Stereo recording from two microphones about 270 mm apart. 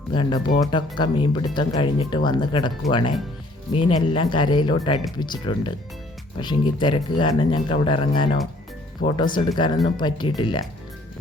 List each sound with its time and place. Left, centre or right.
0.1 s speech: centre
9.8 s speech: centre